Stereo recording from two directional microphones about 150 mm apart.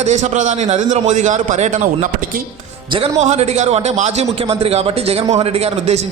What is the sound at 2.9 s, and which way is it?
A man's voice, 45° right (ahead or behind).